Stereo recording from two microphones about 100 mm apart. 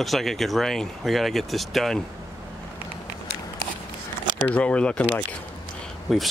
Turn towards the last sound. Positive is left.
turn(degrees=0)  # may be behind; listen again after turning